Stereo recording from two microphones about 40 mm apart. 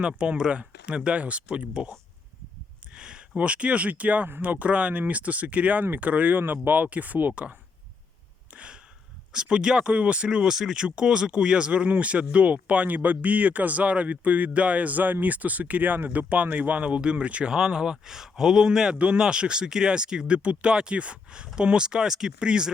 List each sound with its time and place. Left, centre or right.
0.3 s speech: right
2.9 s a sound: right
3.3 s speech: right
8.5 s a sound: right
9.3 s a man's voice: right
18.9 s speech: right